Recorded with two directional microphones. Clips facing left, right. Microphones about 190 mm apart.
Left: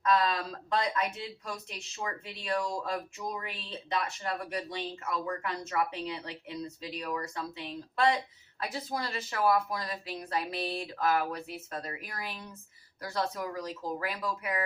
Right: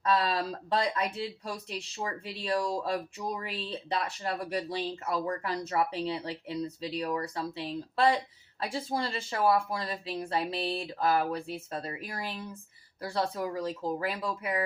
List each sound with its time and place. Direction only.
0.0 s speech: 30° right (ahead or behind)